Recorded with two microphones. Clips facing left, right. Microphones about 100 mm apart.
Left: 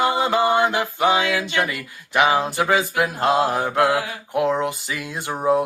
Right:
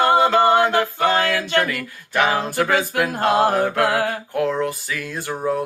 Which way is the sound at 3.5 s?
15° left (ahead or behind).